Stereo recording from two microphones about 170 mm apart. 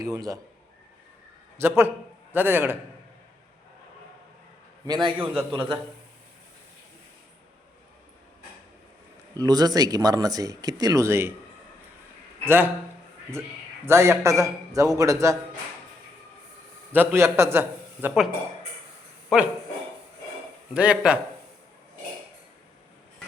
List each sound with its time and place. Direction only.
0.0 s speech: 20° right (ahead or behind)
1.5 s a man's voice: 15° right (ahead or behind)
4.9 s speech: 25° right (ahead or behind)
5.3 s a man's voice: centre (ahead or behind)
9.3 s speech: 20° right (ahead or behind)
12.5 s a man's voice: 10° right (ahead or behind)
13.8 s speech: 15° right (ahead or behind)
16.9 s a man's voice: 10° right (ahead or behind)
19.3 s a man's voice: 5° right (ahead or behind)
20.7 s a man's voice: 5° right (ahead or behind)